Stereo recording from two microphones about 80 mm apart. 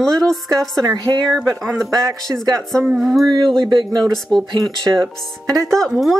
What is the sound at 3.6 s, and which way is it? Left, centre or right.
Speech, right.